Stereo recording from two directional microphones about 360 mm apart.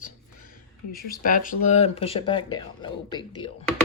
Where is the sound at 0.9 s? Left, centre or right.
Left.